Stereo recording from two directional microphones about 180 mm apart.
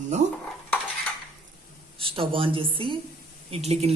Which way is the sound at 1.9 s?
30° right (ahead or behind).